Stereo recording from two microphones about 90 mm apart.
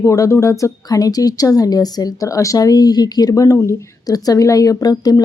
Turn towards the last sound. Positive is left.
turn(degrees=45)  # may be behind; listen again after turning